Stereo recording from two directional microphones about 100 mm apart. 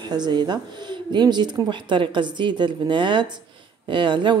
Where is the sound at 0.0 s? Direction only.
45° right (ahead or behind).